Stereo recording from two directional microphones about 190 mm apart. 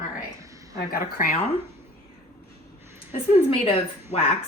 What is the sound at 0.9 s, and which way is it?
Speech, 50° left (ahead or behind).